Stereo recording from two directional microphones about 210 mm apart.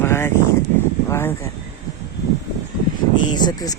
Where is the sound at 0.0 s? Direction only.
10° left (ahead or behind).